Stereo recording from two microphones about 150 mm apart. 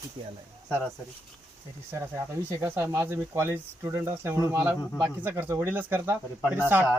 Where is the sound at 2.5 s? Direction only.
20° right (ahead or behind).